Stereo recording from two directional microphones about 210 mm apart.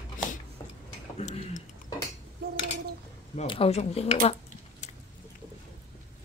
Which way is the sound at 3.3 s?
25° left (ahead or behind).